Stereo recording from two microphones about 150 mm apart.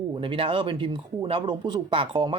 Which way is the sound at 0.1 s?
35° right (ahead or behind).